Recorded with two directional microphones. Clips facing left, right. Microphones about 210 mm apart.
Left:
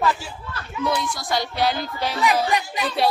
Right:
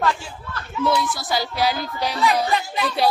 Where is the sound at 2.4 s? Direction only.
15° left (ahead or behind).